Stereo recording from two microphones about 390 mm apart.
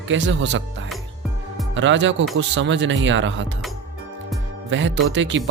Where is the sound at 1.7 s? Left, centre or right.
Right.